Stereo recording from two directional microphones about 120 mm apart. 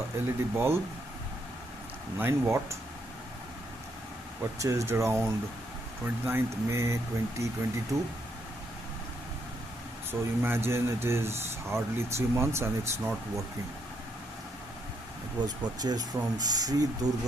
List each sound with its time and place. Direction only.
0.3 s speech: 20° right (ahead or behind)
2.1 s speech: 20° right (ahead or behind)
4.5 s speech: 25° right (ahead or behind)
10.1 s speech: 20° right (ahead or behind)
15.4 s speech: 35° right (ahead or behind)